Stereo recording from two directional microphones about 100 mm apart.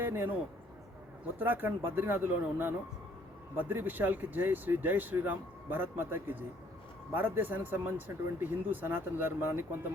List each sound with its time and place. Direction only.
0.0 s a man's voice: 20° right (ahead or behind)
1.4 s speech: 15° right (ahead or behind)